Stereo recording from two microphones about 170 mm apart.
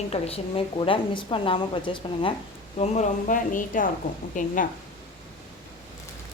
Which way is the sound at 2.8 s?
45° left (ahead or behind).